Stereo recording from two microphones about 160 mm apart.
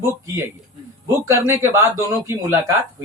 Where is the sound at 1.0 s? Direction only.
15° right (ahead or behind).